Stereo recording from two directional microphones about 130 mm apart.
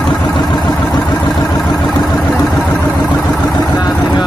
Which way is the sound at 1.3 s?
Centre (ahead or behind).